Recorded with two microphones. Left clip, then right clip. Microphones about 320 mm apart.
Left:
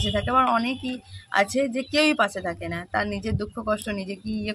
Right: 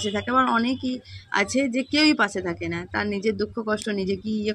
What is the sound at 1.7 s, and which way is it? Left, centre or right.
A woman's voice, centre.